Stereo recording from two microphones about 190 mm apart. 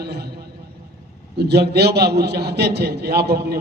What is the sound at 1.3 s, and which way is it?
A man's voice, 60° right (ahead or behind).